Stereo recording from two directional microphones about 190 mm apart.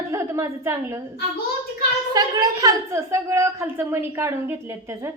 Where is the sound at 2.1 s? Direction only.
20° right (ahead or behind).